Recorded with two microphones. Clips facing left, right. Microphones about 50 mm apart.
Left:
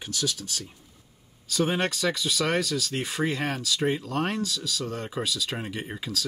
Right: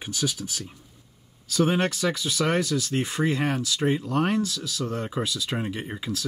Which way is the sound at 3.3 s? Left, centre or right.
Centre.